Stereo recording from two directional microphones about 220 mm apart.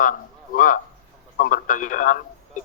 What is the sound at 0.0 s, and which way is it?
A man's voice, 40° left (ahead or behind).